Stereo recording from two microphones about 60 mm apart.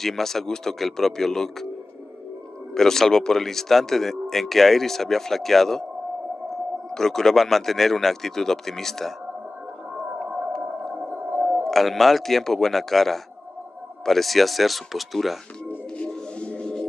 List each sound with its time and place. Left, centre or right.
0.0 s speech: centre
2.7 s speech: centre
6.9 s speech: centre
10.2 s a sound: right
11.0 s whale vocalization: right
11.6 s speech: centre
16.0 s music: centre